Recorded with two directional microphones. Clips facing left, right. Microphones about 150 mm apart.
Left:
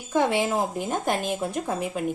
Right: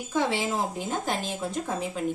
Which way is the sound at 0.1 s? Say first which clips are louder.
Left 4 dB; 55° left (ahead or behind).